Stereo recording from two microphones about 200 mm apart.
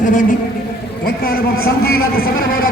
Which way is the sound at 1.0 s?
50° left (ahead or behind).